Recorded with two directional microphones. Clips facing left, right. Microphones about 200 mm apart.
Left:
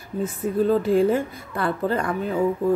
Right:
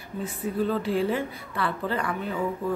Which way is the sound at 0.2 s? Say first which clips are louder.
Left 5 dB; 45° left (ahead or behind).